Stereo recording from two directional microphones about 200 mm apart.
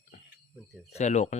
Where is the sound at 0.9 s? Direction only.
35° left (ahead or behind).